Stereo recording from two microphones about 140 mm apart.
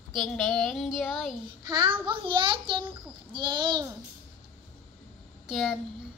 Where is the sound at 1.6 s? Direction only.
30° right (ahead or behind).